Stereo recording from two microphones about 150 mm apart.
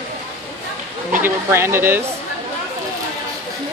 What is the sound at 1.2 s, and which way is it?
Speech, 15° right (ahead or behind).